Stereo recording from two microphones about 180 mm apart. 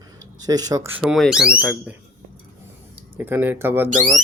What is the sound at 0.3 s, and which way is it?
Speech, 20° right (ahead or behind).